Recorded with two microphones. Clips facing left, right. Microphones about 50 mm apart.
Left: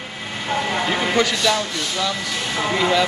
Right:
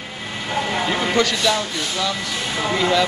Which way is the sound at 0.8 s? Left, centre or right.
Centre.